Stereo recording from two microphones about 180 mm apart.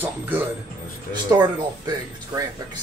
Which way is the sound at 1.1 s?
25° right (ahead or behind).